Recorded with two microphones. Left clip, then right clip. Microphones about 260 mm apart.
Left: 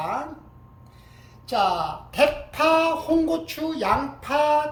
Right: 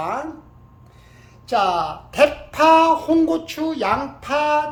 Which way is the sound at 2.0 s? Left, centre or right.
Centre.